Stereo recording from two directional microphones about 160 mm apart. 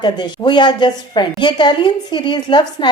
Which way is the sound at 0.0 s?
30° left (ahead or behind).